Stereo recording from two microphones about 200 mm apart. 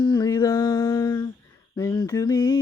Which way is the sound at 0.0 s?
20° left (ahead or behind).